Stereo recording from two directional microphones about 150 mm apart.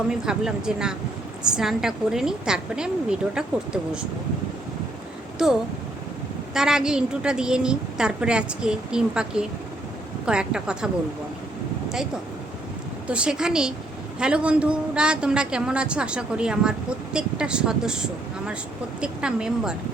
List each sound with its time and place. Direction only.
0.1 s a woman's voice: 5° right (ahead or behind)
6.5 s a woman's voice: 5° right (ahead or behind)
13.1 s a woman's voice: 5° right (ahead or behind)